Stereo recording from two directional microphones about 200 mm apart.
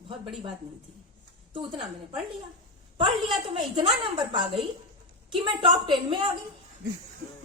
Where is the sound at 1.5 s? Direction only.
25° right (ahead or behind).